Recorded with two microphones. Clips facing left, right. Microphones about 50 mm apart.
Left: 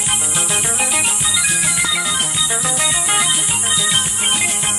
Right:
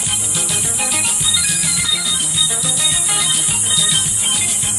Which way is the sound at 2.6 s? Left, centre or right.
Left.